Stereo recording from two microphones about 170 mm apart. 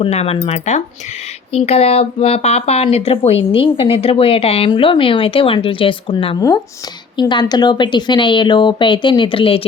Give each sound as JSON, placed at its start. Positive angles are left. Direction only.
{"t": 0.0, "sound": "speech", "side_deg": 35}